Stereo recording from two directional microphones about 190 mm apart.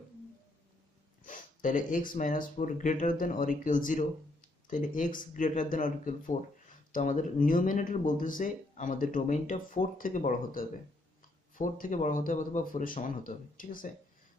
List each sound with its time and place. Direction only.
1.2 s speech: 45° left (ahead or behind)